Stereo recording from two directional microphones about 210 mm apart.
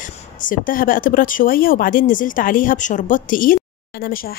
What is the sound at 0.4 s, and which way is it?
Speech, 40° left (ahead or behind).